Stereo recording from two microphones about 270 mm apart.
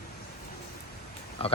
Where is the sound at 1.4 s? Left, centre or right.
Left.